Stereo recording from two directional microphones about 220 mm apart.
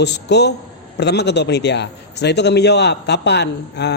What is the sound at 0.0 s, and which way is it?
A man's voice, 50° left (ahead or behind).